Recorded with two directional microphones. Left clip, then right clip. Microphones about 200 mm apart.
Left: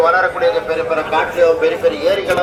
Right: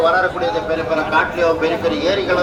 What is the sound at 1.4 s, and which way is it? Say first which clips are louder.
A man's voice: left 4 dB; 50° right (ahead or behind).